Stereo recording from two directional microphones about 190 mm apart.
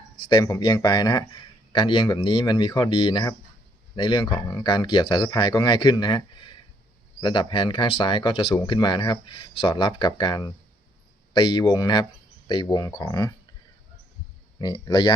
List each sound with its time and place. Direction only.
0.3 s speech: 20° left (ahead or behind)
14.6 s speech: 20° left (ahead or behind)